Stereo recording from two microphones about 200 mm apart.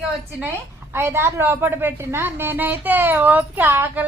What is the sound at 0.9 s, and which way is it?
A woman's voice, 10° right (ahead or behind).